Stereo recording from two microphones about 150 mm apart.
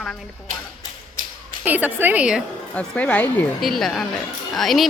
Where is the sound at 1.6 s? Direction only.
10° right (ahead or behind).